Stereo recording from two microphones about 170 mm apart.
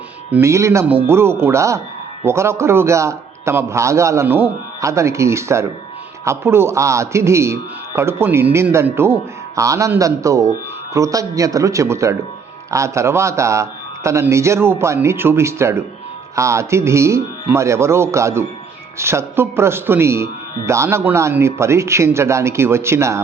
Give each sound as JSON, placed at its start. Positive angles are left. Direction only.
{"t": 0.3, "sound": "a man's voice", "side_deg": -15}